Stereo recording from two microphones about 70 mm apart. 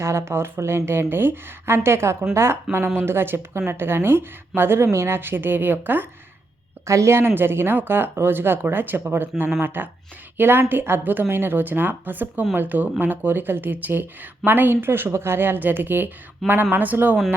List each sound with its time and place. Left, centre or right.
0.0 s speech: right
6.8 s speech: right
16.4 s speech: centre
16.7 s speech: right